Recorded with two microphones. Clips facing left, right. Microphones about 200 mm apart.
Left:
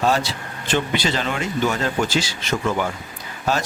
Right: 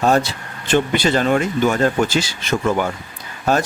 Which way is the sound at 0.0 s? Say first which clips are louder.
Right 4 dB; 50° right (ahead or behind).